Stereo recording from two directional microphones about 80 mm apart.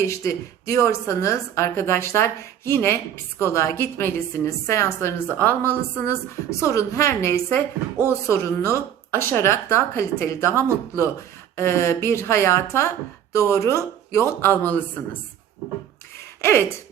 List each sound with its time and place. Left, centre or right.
0.0 s a woman's voice: left
6.6 s a woman's voice: left
16.4 s a woman's voice: left